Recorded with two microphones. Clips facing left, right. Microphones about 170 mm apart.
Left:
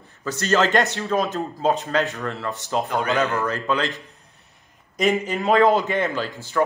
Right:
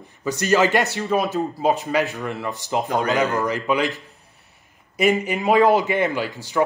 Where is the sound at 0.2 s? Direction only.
15° right (ahead or behind).